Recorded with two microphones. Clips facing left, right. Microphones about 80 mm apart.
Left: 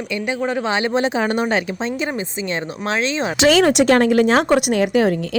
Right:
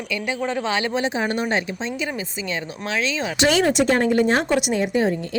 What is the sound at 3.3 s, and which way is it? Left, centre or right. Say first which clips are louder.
Speech: left 4 dB; left.